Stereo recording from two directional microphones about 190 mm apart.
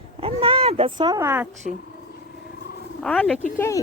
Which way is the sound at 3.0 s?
5° left (ahead or behind).